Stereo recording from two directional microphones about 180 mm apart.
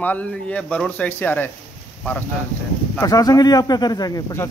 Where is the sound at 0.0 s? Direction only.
10° left (ahead or behind).